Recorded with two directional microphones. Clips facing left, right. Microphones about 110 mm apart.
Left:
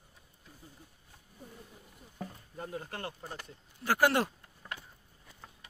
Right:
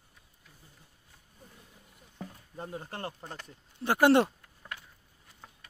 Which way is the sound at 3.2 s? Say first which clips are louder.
Even; 5° left (ahead or behind).